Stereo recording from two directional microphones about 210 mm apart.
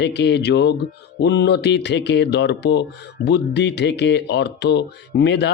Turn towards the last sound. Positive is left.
turn(degrees=55)  # may be behind; listen again after turning